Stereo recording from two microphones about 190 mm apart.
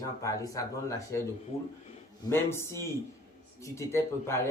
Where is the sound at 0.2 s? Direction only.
15° left (ahead or behind).